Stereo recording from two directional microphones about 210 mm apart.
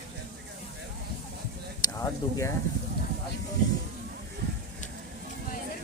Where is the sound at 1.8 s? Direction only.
15° left (ahead or behind).